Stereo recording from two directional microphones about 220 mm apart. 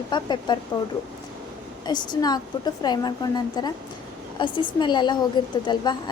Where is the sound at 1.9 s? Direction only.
20° left (ahead or behind).